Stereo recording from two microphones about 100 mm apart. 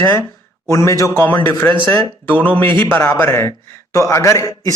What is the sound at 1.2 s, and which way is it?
A man's voice, 15° left (ahead or behind).